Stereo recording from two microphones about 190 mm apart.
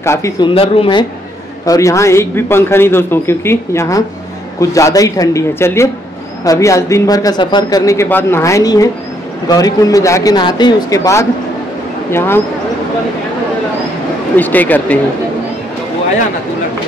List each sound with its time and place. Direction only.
0.0 s a man's voice: 15° left (ahead or behind)
0.6 s speech: 25° left (ahead or behind)
1.7 s a man's voice: 15° left (ahead or behind)
14.3 s a man's voice: 10° left (ahead or behind)